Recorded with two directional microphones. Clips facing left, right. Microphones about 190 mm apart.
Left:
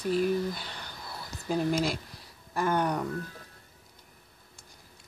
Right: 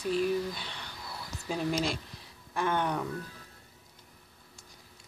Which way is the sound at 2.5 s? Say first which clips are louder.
Left 2 dB; 5° left (ahead or behind).